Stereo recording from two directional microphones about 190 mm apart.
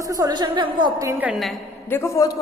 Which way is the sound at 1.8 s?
15° left (ahead or behind).